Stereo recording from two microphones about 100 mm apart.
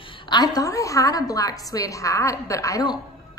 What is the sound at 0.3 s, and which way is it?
A woman's voice, 40° left (ahead or behind).